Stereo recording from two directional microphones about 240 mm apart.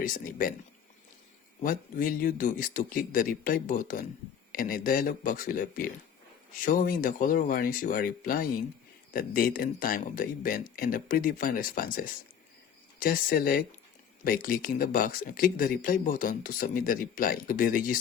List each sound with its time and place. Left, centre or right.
0.0 s speech: left
1.6 s speech: left